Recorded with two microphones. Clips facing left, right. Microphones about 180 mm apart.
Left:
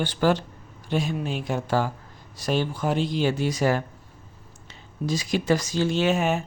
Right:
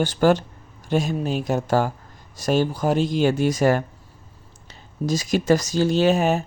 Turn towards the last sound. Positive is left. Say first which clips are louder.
# right 4 dB
turn(degrees=-35)  # may be behind; listen again after turning